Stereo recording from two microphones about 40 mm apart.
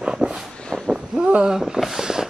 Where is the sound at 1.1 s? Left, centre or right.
Right.